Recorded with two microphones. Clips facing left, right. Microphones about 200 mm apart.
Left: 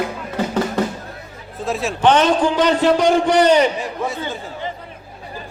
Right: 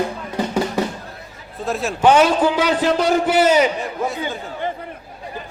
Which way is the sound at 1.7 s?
Centre (ahead or behind).